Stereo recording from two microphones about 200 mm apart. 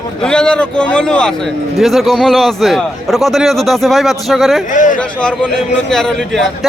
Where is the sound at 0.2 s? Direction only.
5° left (ahead or behind).